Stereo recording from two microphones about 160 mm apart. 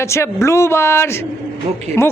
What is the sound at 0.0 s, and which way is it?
A woman's voice, 15° left (ahead or behind).